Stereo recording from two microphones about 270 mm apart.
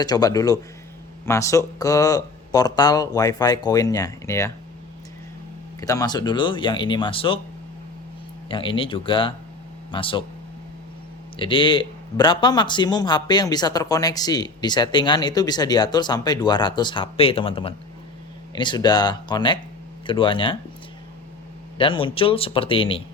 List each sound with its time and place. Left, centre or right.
0.0 s speech: centre
5.8 s speech: centre
8.4 s speech: centre
11.3 s speech: centre
21.8 s speech: centre